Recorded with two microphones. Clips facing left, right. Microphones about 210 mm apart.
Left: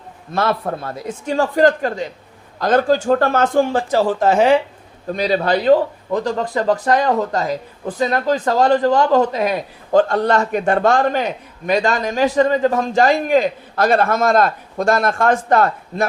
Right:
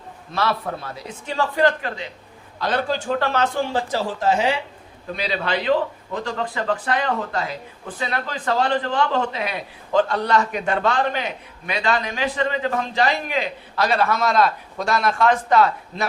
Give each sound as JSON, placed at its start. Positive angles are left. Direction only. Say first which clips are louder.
{"t": 0.3, "sound": "a man's voice", "louder": "left 4 dB", "side_deg": 50}